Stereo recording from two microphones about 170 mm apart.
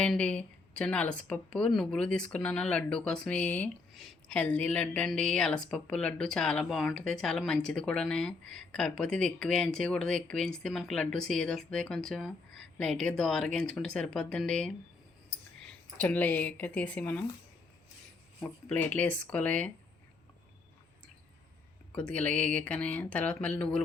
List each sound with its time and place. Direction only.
0.0 s speech: 5° left (ahead or behind)
15.3 s clicking: 80° left
16.0 s speech: 10° left (ahead or behind)
18.3 s speech: 10° left (ahead or behind)
21.9 s speech: 10° left (ahead or behind)